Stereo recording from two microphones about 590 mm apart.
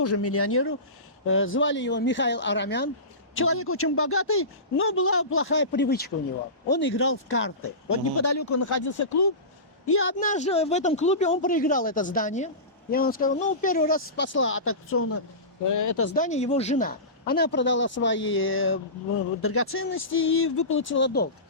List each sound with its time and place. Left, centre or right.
0.0 s a woman's voice: left